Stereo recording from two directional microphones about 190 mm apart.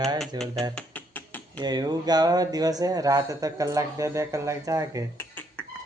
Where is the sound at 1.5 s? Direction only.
20° right (ahead or behind).